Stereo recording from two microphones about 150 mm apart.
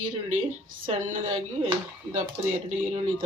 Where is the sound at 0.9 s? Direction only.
55° right (ahead or behind).